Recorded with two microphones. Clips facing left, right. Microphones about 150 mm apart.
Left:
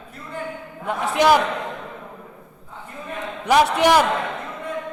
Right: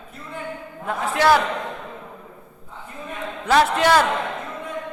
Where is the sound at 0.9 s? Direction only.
20° left (ahead or behind).